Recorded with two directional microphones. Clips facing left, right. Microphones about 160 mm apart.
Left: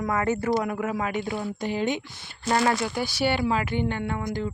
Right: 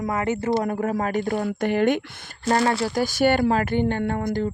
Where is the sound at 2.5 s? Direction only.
35° right (ahead or behind).